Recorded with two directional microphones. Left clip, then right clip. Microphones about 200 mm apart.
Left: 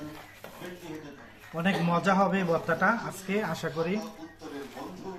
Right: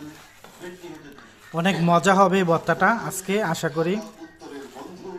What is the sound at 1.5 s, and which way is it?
Speech, 60° right (ahead or behind).